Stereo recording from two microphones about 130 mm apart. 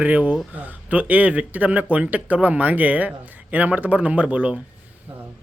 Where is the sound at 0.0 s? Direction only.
15° right (ahead or behind).